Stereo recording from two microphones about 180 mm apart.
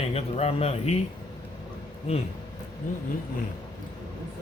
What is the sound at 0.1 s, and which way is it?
Speech, 35° left (ahead or behind).